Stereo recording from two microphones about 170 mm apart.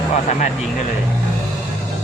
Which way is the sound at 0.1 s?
45° left (ahead or behind).